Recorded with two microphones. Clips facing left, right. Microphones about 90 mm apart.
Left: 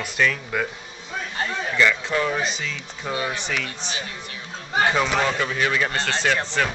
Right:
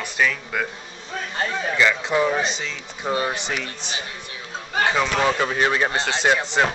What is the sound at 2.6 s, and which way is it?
Speech, 35° right (ahead or behind).